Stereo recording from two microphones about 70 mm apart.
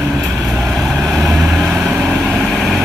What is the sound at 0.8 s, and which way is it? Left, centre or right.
Vehicle, centre.